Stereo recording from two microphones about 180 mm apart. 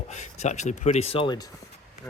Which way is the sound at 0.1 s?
40° left (ahead or behind).